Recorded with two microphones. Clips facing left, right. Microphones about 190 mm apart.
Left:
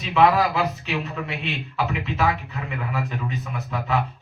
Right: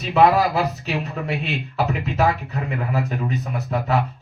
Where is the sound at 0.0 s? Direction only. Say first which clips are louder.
Right 2 dB; 40° right (ahead or behind).